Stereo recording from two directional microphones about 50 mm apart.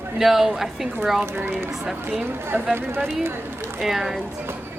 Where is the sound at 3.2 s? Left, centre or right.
Right.